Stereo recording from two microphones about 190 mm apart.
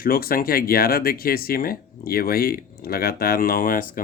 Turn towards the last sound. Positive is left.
turn(degrees=45)  # may be behind; listen again after turning